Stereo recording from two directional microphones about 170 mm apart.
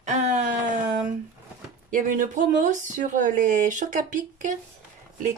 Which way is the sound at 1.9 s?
50° right (ahead or behind).